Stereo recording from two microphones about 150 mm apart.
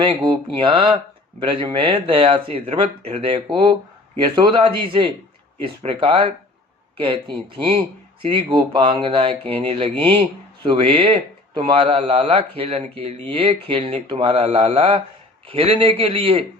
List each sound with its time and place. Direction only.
0.0 s speech: 35° right (ahead or behind)